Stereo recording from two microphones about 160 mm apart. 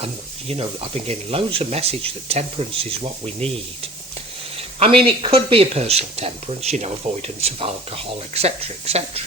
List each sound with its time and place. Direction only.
0.0 s speech: 35° right (ahead or behind)
4.5 s a sound: 35° right (ahead or behind)
5.0 s speech: 35° right (ahead or behind)